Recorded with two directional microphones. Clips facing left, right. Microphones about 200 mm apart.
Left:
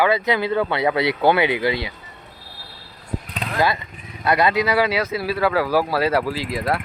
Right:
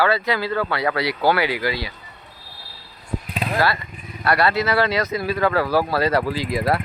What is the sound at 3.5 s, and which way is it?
Speech, 20° left (ahead or behind).